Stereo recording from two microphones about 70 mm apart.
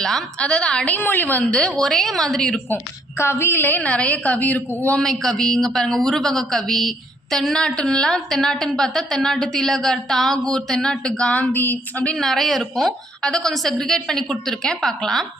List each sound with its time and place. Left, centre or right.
0.0 s a woman's voice: centre
0.9 s a woman's voice: left; by 2.6 s centre
2.6 s a woman's voice: left
3.8 s a woman's voice: centre
4.9 s a woman's voice: centre
11.3 s a woman's voice: left
12.1 s speech: centre